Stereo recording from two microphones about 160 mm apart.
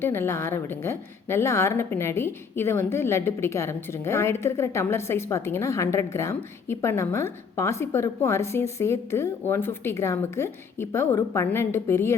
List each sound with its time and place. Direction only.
0.0 s a woman's voice: 15° left (ahead or behind)